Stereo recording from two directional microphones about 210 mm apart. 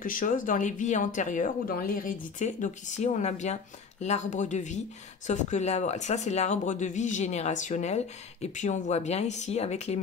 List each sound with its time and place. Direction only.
0.0 s speech: 40° left (ahead or behind)